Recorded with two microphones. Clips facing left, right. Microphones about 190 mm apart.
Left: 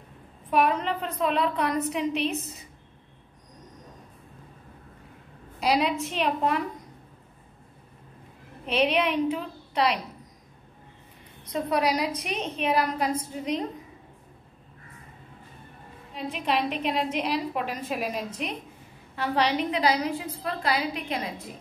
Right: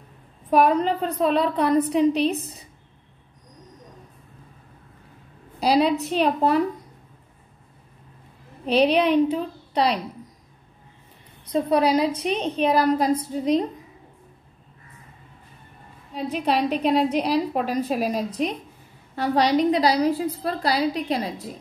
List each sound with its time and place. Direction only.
0.5 s a woman's voice: 40° right (ahead or behind)
5.6 s a woman's voice: 35° right (ahead or behind)
8.6 s a woman's voice: 35° right (ahead or behind)
11.5 s a woman's voice: 30° right (ahead or behind)
16.2 s a woman's voice: 40° right (ahead or behind)